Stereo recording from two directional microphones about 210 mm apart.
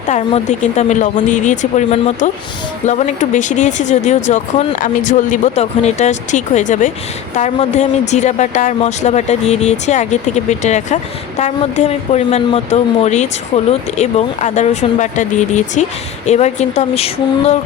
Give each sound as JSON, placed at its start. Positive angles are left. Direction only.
{"t": 0.1, "sound": "speech", "side_deg": 30}